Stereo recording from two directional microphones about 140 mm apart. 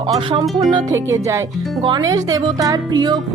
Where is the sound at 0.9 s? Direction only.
20° right (ahead or behind).